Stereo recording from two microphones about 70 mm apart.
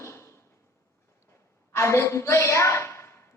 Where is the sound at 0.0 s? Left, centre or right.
Left.